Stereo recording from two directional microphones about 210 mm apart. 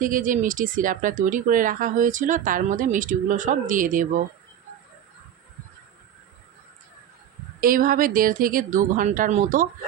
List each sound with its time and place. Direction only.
0.0 s speech: 40° right (ahead or behind)
7.6 s speech: 40° right (ahead or behind)